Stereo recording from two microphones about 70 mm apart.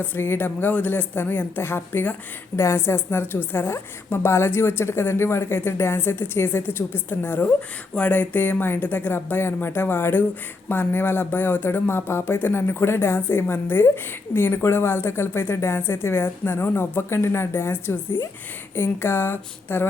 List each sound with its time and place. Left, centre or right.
0.0 s speech: left
2.6 s a woman's voice: left